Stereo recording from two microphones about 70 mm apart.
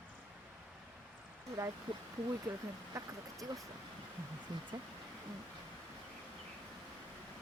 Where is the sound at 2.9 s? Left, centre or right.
Right.